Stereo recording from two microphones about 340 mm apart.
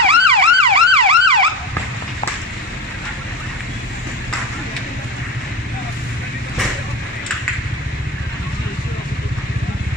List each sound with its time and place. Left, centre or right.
0.0 s emergency vehicle: centre